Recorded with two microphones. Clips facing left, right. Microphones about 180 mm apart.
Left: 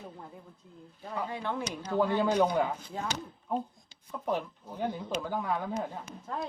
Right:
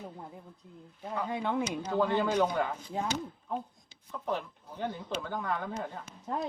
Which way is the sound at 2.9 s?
15° right (ahead or behind).